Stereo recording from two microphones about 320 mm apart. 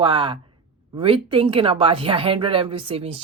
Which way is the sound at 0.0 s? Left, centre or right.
Centre.